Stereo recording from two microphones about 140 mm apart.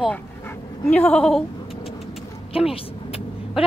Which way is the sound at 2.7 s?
40° left (ahead or behind).